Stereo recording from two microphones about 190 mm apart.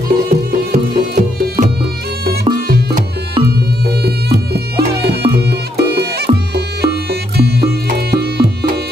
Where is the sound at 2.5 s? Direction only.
55° right (ahead or behind).